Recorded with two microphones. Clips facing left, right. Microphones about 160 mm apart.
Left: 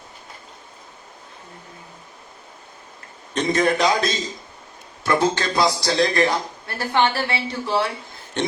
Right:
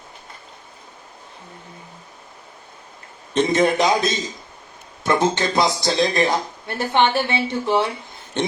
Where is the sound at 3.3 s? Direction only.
25° right (ahead or behind).